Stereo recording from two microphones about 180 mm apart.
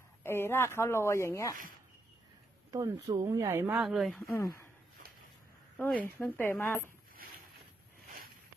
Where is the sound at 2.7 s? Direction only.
20° right (ahead or behind); by 4.3 s centre (ahead or behind).